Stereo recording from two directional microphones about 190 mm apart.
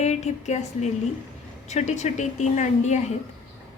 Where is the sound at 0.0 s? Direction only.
35° left (ahead or behind).